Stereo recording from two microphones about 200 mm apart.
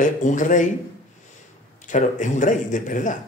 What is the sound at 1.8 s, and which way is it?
Speech, 40° left (ahead or behind).